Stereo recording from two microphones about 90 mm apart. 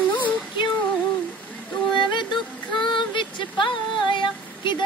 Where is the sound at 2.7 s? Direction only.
60° left (ahead or behind).